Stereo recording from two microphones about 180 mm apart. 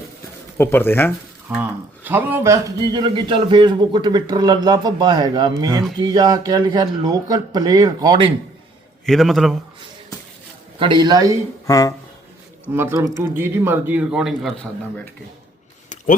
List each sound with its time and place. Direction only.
0.5 s speech: 10° left (ahead or behind)
1.5 s a man's voice: 10° right (ahead or behind)
9.0 s a man's voice: centre (ahead or behind)
10.8 s a man's voice: 25° right (ahead or behind)
11.6 s speech: 20° left (ahead or behind)
12.7 s speech: 15° right (ahead or behind); by 15.0 s 5° left (ahead or behind)